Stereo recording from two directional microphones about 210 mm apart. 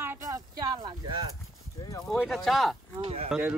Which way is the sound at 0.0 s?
15° right (ahead or behind).